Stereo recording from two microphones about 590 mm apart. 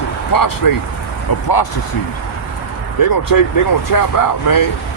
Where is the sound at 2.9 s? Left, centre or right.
Left.